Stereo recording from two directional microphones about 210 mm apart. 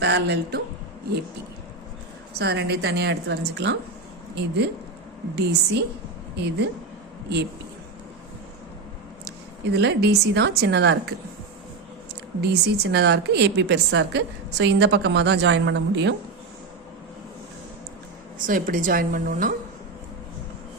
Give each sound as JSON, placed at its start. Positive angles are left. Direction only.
{"t": 0.0, "sound": "a woman's voice", "side_deg": -55}
{"t": 2.4, "sound": "a woman's voice", "side_deg": -50}
{"t": 9.2, "sound": "a woman's voice", "side_deg": -50}
{"t": 12.4, "sound": "a woman's voice", "side_deg": -50}
{"t": 18.4, "sound": "a woman's voice", "side_deg": -40}